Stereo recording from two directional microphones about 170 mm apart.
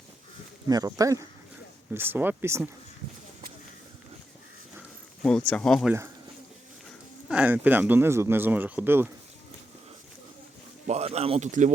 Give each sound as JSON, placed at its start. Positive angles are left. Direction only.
{"t": 0.7, "sound": "speech", "side_deg": -20}
{"t": 5.5, "sound": "speech", "side_deg": 5}
{"t": 7.3, "sound": "speech", "side_deg": -10}
{"t": 10.8, "sound": "speech", "side_deg": -40}